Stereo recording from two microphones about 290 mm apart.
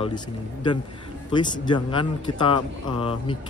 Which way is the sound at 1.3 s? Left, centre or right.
Centre.